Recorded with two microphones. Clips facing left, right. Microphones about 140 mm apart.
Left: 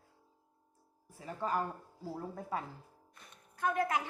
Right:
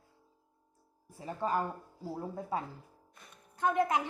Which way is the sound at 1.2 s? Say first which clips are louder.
Right 3 dB; 25° right (ahead or behind).